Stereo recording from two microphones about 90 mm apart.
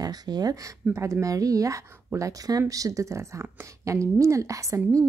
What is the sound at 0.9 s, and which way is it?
Speech, 35° right (ahead or behind).